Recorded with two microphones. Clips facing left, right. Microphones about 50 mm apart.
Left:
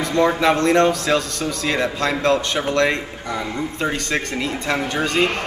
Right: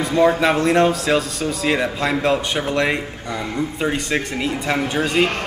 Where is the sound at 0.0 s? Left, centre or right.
Centre.